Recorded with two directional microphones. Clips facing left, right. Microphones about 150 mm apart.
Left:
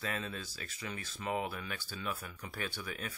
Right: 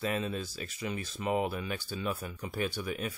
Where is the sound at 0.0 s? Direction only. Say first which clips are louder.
Right 7 dB; 15° right (ahead or behind).